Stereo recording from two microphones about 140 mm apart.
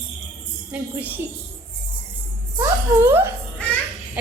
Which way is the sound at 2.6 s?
15° right (ahead or behind).